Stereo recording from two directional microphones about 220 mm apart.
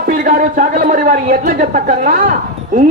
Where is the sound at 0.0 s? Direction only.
40° right (ahead or behind).